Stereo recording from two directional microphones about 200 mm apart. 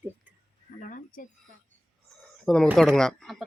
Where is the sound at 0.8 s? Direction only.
40° left (ahead or behind).